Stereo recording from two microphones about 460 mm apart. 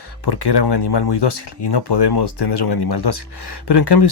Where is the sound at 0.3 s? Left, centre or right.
Left.